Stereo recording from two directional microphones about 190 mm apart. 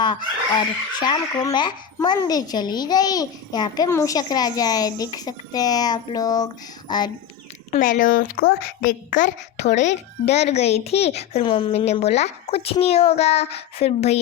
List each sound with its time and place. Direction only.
0.0 s speech: 25° left (ahead or behind)
7.7 s a woman's voice: 45° left (ahead or behind)